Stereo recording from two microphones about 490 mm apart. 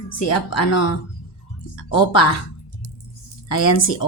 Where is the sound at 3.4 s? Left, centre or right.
Left.